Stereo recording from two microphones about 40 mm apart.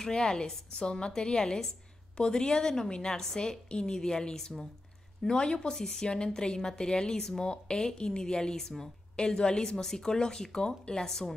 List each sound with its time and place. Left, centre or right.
0.0 s a woman's voice: centre